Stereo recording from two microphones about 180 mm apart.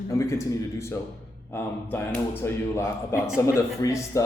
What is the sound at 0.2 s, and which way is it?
Speech, 15° left (ahead or behind).